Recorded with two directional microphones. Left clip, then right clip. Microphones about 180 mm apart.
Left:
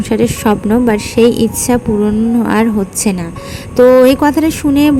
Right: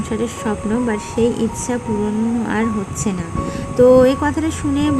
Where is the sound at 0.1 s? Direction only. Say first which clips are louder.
Left 10 dB; 30° left (ahead or behind).